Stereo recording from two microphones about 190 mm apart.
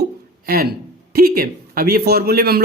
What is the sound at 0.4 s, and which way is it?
A man's voice, 50° right (ahead or behind).